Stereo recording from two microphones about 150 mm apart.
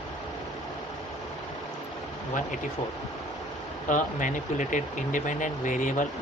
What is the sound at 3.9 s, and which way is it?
Speech, 60° left (ahead or behind).